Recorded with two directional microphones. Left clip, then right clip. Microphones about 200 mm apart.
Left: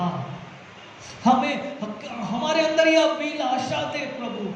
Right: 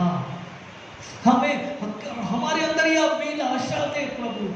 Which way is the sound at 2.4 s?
40° left (ahead or behind).